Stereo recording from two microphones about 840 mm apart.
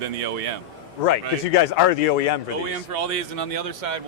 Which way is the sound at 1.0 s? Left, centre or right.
Left.